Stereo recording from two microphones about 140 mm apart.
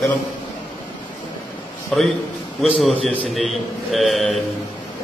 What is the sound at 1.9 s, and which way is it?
Speech, 5° left (ahead or behind).